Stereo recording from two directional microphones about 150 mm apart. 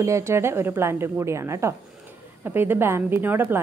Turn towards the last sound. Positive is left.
turn(degrees=-15)  # may be behind; listen again after turning